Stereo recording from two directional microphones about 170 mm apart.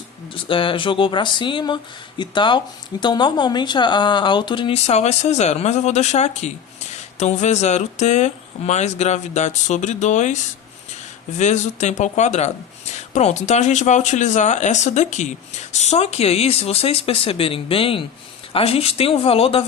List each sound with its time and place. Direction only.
0.3 s speech: 30° left (ahead or behind)